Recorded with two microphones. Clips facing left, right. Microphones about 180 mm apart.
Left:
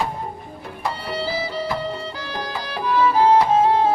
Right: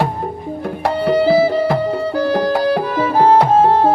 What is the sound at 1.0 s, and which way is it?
Music, 60° right (ahead or behind).